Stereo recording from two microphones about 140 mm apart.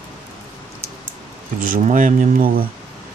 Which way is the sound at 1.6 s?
75° right (ahead or behind).